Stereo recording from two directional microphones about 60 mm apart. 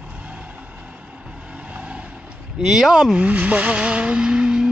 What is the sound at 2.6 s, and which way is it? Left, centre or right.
Vehicle, centre.